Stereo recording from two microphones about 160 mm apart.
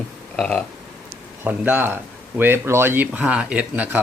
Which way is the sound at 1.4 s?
10° right (ahead or behind).